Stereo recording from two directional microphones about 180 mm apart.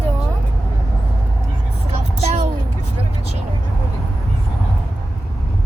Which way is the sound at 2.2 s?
40° right (ahead or behind).